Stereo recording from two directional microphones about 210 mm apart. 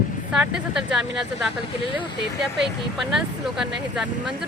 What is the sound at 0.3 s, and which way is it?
Speech, 5° right (ahead or behind).